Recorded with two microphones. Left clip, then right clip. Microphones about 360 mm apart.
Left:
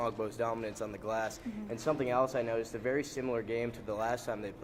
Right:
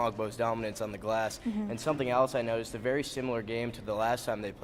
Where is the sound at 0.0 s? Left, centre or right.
Right.